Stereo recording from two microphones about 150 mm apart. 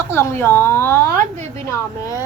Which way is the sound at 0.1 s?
15° left (ahead or behind).